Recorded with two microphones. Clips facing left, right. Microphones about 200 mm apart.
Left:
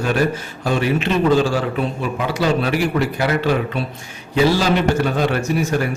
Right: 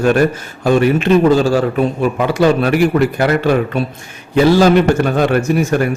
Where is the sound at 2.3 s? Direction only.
55° right (ahead or behind).